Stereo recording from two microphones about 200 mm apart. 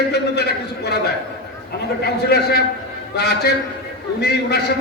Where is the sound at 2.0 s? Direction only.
50° left (ahead or behind).